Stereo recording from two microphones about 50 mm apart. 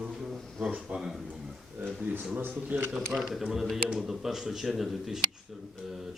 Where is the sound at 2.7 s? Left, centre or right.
Right.